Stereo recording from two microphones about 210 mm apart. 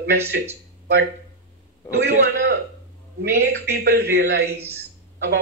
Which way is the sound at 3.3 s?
50° right (ahead or behind).